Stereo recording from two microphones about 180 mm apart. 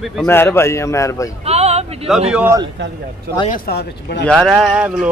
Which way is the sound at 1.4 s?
35° right (ahead or behind).